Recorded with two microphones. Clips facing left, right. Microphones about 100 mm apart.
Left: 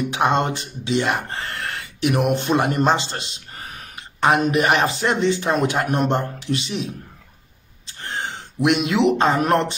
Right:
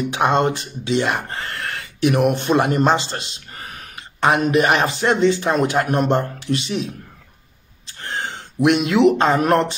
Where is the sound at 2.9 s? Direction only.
40° right (ahead or behind).